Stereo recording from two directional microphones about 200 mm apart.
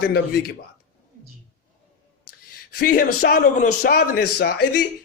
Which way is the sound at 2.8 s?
45° left (ahead or behind).